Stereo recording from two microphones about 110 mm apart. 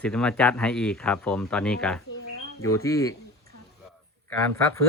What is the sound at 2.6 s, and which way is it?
Speech, 30° left (ahead or behind).